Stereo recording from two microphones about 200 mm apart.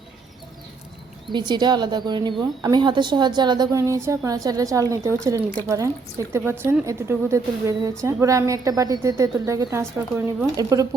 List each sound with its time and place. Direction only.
1.3 s a woman's voice: 20° right (ahead or behind)